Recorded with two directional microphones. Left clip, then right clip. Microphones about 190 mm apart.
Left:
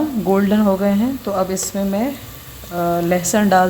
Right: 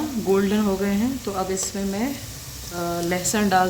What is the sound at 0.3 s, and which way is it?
Speech, 50° left (ahead or behind).